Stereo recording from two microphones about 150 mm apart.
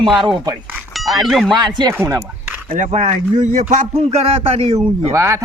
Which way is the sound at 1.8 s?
20° right (ahead or behind).